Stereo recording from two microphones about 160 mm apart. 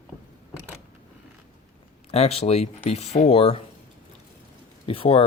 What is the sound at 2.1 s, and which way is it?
Speech, 40° left (ahead or behind).